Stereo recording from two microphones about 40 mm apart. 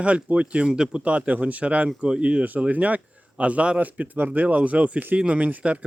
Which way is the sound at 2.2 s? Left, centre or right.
Right.